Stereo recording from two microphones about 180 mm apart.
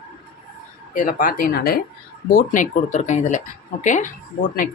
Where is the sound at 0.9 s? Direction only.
50° left (ahead or behind).